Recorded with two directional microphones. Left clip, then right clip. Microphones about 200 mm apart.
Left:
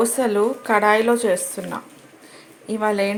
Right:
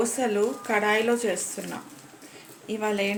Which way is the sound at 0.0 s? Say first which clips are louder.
Left 6 dB; 20° left (ahead or behind).